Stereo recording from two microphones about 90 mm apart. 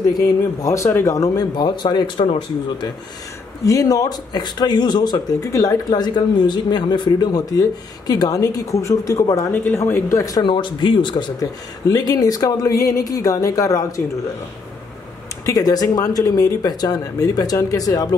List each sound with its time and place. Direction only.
0.1 s speech: 40° left (ahead or behind); by 2.3 s 70° left (ahead or behind)
3.6 s speech: 40° left (ahead or behind); by 5.2 s 55° left (ahead or behind)
5.4 s speech: 35° left (ahead or behind)
9.8 s speech: 30° left (ahead or behind)
10.4 s speech: 65° left (ahead or behind)
11.9 s speech: 45° left (ahead or behind)
15.4 s speech: 45° left (ahead or behind)